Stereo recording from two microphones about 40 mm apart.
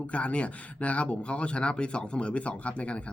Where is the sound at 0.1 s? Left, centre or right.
Left.